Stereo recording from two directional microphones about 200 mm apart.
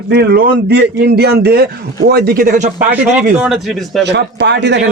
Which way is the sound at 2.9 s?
10° right (ahead or behind).